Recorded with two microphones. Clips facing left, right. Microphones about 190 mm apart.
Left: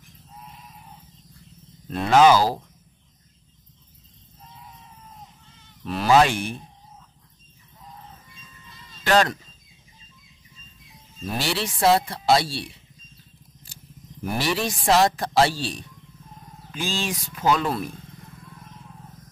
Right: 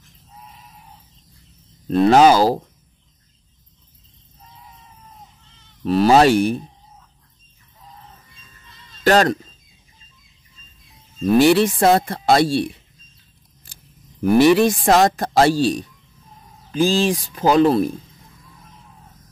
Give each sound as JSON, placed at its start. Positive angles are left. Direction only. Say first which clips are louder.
{"t": 1.9, "sound": "speech", "louder": "right 4 dB", "side_deg": -35}
{"t": 2.3, "sound": "speech", "louder": "right 5 dB", "side_deg": -25}
{"t": 5.9, "sound": "speech", "louder": "right 5 dB", "side_deg": -35}
{"t": 9.0, "sound": "speech", "louder": "right 5 dB", "side_deg": -40}
{"t": 11.3, "sound": "speech", "louder": "right 14 dB", "side_deg": -50}
{"t": 13.7, "sound": "a sound", "louder": "left 1 dB", "side_deg": -55}
{"t": 14.2, "sound": "speech", "louder": "right 13 dB", "side_deg": -55}